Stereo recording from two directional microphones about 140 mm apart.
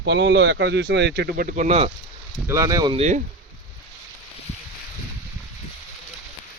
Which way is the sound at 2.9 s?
55° right (ahead or behind).